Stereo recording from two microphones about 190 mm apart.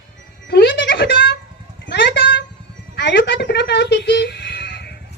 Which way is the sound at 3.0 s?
65° left (ahead or behind).